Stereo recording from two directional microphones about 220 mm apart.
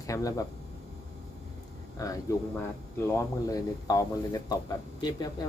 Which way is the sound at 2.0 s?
15° left (ahead or behind).